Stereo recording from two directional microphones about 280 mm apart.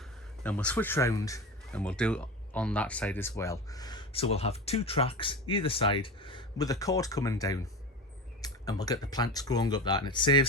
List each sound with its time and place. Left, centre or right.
0.4 s speech: centre